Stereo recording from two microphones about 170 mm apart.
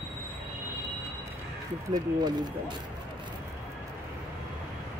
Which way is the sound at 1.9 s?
25° right (ahead or behind).